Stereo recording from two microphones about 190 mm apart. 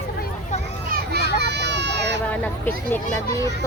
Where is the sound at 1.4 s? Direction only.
60° right (ahead or behind).